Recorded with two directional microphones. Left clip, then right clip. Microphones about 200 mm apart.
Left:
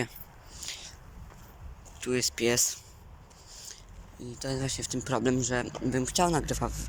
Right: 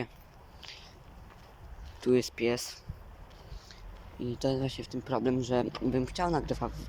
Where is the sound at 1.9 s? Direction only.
25° right (ahead or behind).